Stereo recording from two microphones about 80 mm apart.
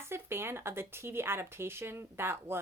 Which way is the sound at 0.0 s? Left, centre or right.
Right.